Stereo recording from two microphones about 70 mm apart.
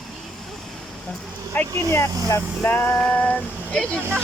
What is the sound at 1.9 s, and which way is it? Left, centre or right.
Speech, left.